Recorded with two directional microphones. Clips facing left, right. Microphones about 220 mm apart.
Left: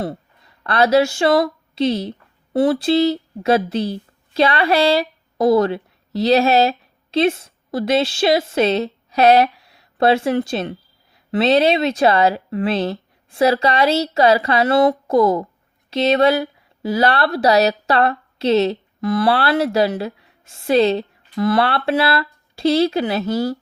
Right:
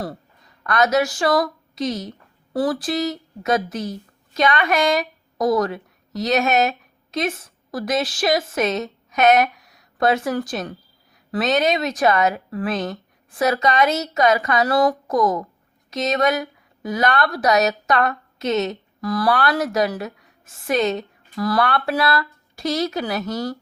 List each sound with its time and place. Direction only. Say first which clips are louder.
0.6 s a woman's voice: left 4 dB; 30° left (ahead or behind)